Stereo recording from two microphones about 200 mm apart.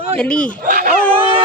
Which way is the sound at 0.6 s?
45° right (ahead or behind).